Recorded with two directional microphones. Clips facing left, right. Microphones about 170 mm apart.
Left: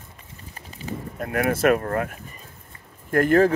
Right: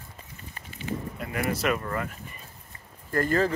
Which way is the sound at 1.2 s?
55° left (ahead or behind).